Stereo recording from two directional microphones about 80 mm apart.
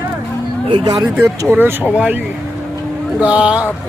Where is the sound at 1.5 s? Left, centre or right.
Right.